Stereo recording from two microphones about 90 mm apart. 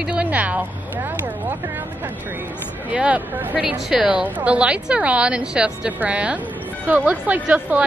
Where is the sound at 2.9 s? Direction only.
15° right (ahead or behind).